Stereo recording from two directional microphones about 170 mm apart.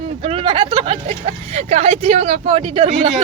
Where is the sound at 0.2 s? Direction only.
35° right (ahead or behind).